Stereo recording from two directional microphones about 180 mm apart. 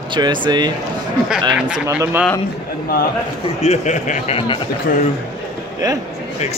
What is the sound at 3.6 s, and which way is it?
Speech, 40° left (ahead or behind).